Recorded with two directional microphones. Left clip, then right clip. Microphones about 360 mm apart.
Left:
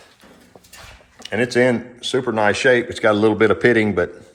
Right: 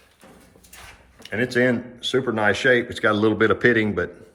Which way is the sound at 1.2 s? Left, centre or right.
Centre.